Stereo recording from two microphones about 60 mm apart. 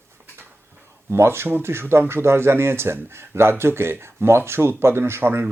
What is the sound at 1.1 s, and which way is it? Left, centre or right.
Speech, right.